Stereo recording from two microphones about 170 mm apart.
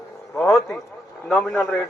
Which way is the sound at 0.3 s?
5° left (ahead or behind).